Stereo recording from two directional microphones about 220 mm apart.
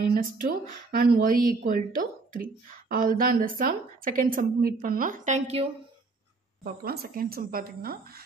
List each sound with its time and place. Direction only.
0.1 s speech: 40° right (ahead or behind)
6.6 s speech: 45° right (ahead or behind)